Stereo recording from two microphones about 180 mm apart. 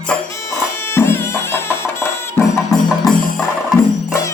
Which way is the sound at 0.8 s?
15° left (ahead or behind).